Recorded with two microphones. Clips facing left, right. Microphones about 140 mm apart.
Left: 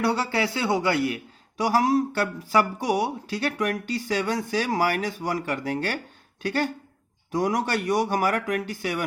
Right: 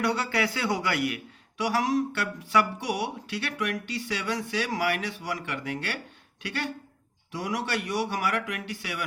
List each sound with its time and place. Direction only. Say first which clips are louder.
0.0 s a man's voice: left 3 dB; 30° left (ahead or behind)